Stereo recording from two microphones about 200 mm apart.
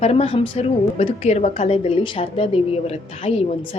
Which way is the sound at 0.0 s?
30° left (ahead or behind).